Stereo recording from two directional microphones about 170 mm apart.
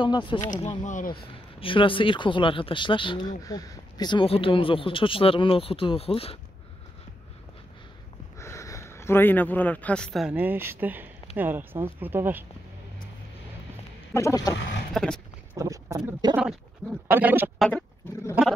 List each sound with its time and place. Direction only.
0.0 s speech: 30° left (ahead or behind)
0.5 s speech: 45° left (ahead or behind)
1.2 s speech: 30° left (ahead or behind)
8.4 s speech: 15° left (ahead or behind); by 12.4 s 10° right (ahead or behind)
14.1 s speech: 20° left (ahead or behind)
15.0 s wild animals: 5° left (ahead or behind)
15.5 s speech: 20° right (ahead or behind)
17.1 s speech: 10° right (ahead or behind)
17.6 s wild animals: 5° left (ahead or behind)